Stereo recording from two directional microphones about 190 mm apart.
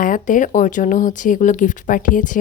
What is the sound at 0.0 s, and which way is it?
A woman's voice, 45° left (ahead or behind).